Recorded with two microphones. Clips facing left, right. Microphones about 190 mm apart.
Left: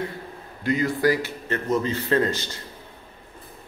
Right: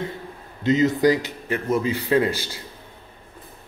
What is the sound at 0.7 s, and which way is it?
A man's voice, 20° right (ahead or behind).